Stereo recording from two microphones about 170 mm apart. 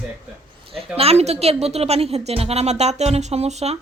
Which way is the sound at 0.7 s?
35° right (ahead or behind).